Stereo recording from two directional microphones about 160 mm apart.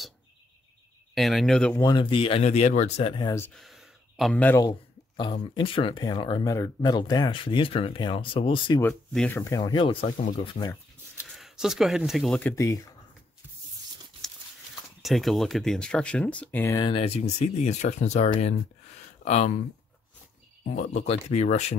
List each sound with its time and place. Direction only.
1.1 s speech: centre (ahead or behind)
1.7 s speech: 20° left (ahead or behind)
3.5 s a sound: centre (ahead or behind)
4.4 s speech: 10° left (ahead or behind)
4.6 s a sound: 30° left (ahead or behind)
5.4 s speech: 30° left (ahead or behind)
9.1 s speech: 5° left (ahead or behind)
9.6 s speech: 30° left (ahead or behind)
11.2 s speech: centre (ahead or behind)
12.4 s speech: 15° left (ahead or behind)
15.0 s speech: centre (ahead or behind)
16.7 s speech: 30° left (ahead or behind); by 19.6 s 45° left (ahead or behind)
20.7 s speech: 50° left (ahead or behind)